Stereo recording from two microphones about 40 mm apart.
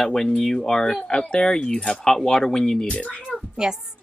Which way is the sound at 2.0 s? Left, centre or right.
Centre.